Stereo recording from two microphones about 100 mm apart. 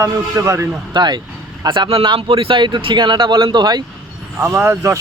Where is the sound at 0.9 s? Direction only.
50° right (ahead or behind).